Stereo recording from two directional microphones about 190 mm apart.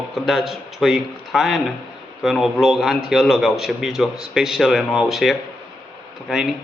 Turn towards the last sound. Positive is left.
turn(degrees=0)  # may be behind; listen again after turning